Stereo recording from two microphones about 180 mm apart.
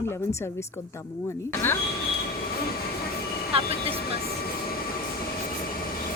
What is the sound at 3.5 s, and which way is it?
Vehicle, 30° right (ahead or behind).